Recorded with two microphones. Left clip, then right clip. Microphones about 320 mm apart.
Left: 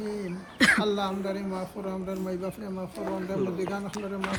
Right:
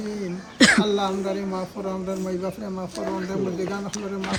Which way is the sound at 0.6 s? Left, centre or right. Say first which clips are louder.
Right 5 dB; centre.